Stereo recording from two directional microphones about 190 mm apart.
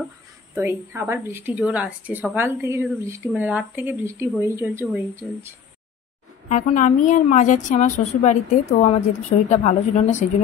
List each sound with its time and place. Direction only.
0.6 s speech: 10° right (ahead or behind)
6.5 s a woman's voice: 40° left (ahead or behind)